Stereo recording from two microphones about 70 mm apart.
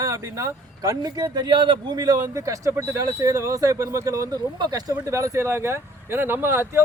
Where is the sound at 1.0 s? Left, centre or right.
Right.